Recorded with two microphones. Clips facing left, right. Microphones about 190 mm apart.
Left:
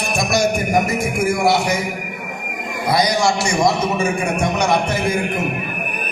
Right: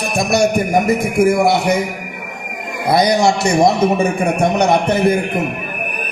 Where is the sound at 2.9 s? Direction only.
60° right (ahead or behind).